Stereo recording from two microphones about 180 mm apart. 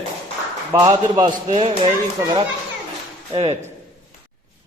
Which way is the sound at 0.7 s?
20° right (ahead or behind).